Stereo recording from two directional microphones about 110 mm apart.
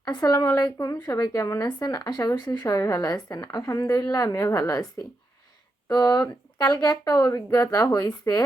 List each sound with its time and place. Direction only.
0.0 s a woman's voice: 40° left (ahead or behind)
5.9 s a woman's voice: 40° left (ahead or behind)